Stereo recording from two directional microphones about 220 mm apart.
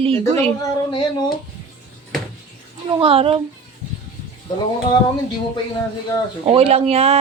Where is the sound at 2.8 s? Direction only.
25° right (ahead or behind).